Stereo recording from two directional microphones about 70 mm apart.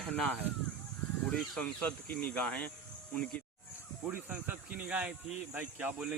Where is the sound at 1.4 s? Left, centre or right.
Centre.